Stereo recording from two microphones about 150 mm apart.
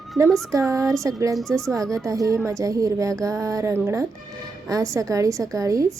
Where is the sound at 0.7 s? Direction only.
20° right (ahead or behind).